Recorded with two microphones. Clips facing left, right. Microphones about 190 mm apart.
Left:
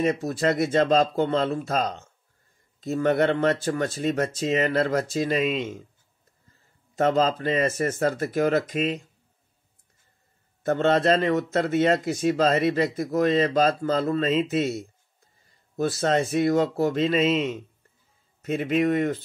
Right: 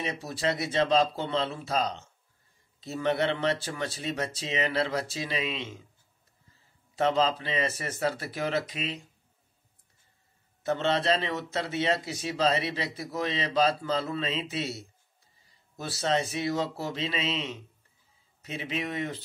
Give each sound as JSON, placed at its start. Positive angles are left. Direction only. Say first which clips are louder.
{"t": 0.0, "sound": "speech", "louder": "left 8 dB", "side_deg": 50}
{"t": 7.0, "sound": "speech", "louder": "left 4 dB", "side_deg": 45}
{"t": 10.6, "sound": "speech", "louder": "left 6 dB", "side_deg": 50}